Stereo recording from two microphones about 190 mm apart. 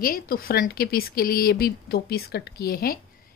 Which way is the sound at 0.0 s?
50° left (ahead or behind).